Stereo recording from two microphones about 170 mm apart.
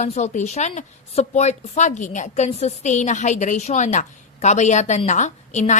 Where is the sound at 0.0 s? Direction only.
45° left (ahead or behind).